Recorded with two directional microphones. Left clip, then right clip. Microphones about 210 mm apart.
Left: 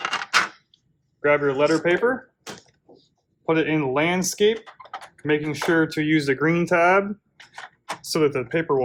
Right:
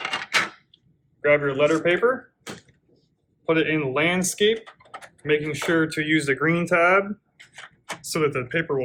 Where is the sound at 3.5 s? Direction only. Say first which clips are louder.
Even; 40° left (ahead or behind).